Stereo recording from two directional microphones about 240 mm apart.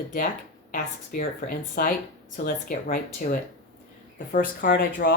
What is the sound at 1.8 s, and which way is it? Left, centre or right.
Speech, left.